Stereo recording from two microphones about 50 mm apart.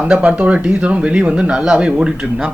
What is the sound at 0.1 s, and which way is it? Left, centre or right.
Speech, right.